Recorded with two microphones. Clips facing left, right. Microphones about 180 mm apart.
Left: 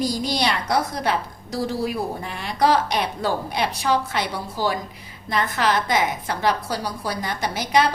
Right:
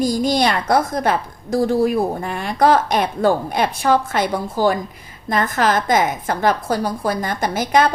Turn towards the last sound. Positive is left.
turn(degrees=-50)  # may be behind; listen again after turning